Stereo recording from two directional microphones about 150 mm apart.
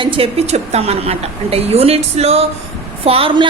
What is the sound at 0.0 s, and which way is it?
A woman's voice, 35° right (ahead or behind).